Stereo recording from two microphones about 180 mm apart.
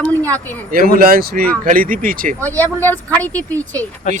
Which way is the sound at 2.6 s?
10° left (ahead or behind).